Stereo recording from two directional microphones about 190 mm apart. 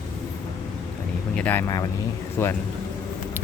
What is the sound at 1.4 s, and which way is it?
Speech, 10° left (ahead or behind).